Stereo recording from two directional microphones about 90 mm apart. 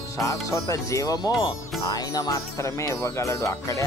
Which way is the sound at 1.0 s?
50° left (ahead or behind).